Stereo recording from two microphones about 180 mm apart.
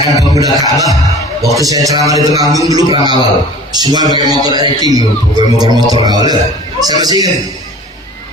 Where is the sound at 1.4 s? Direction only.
20° right (ahead or behind).